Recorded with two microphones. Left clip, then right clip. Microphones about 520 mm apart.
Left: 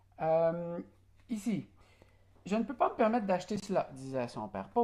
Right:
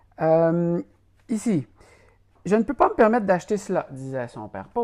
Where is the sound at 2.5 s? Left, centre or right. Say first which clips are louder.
Right 12 dB; right.